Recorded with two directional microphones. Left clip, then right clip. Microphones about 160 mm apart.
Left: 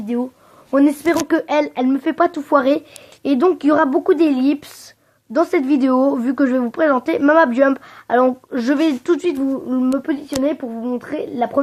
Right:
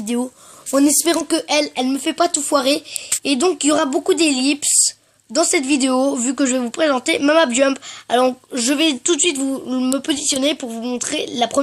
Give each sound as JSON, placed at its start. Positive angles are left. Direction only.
{"t": 0.7, "sound": "speech", "side_deg": -20}
{"t": 1.3, "sound": "a woman's voice", "side_deg": -5}
{"t": 9.4, "sound": "speech", "side_deg": -15}